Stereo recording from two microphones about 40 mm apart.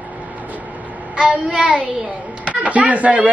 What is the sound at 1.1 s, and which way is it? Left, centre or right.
A child's voice, right.